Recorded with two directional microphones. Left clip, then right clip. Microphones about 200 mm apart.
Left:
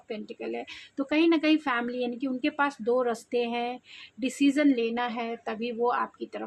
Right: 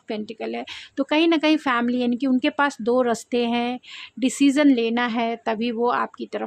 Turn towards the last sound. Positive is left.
turn(degrees=-45)  # may be behind; listen again after turning